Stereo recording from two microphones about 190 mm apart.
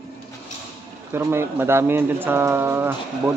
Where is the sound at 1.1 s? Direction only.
15° right (ahead or behind).